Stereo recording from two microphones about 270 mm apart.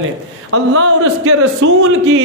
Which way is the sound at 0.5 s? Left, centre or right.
Right.